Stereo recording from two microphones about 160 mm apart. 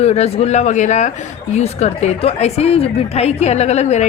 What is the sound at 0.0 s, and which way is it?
A woman's voice, 40° left (ahead or behind).